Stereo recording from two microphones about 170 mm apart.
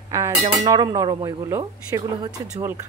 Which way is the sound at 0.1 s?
15° right (ahead or behind).